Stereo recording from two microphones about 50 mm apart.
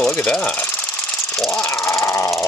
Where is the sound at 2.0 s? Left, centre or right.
Left.